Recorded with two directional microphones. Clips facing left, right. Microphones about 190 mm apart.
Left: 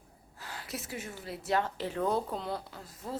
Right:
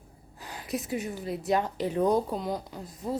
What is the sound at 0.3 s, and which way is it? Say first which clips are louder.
A woman's voice: right 7 dB; 15° right (ahead or behind).